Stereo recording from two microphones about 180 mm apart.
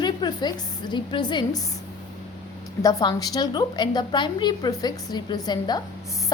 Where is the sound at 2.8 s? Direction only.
20° left (ahead or behind).